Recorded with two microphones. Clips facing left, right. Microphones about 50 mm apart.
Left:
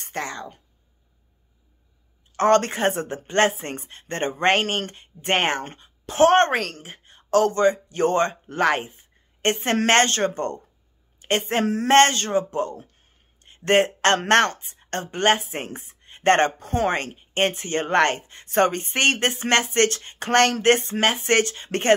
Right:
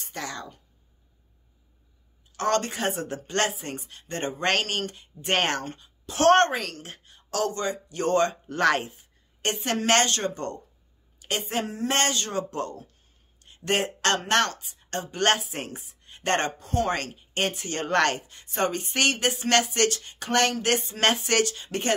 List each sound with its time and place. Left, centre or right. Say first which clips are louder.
0.0 s a sound: left 5 dB; left
2.3 s speech: left 7 dB; left
5.3 s speech: left 3 dB; left
5.7 s a sound: left 1 dB; left
7.1 s a man's voice: left 8 dB; left
8.5 s speech: left 2 dB; centre
9.4 s a woman's voice: left 5 dB; left
12.3 s speech: left 6 dB; left
13.4 s speech: left 7 dB; left